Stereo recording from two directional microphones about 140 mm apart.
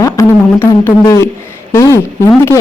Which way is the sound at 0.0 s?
20° left (ahead or behind).